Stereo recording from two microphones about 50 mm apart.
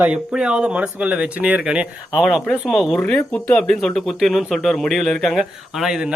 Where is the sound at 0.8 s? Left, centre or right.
Right.